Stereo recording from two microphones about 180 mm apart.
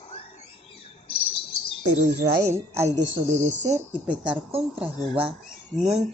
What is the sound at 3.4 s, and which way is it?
Speech, 40° right (ahead or behind).